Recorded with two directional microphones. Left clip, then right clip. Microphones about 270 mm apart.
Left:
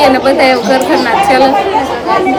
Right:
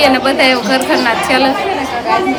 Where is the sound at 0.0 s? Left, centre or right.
Centre.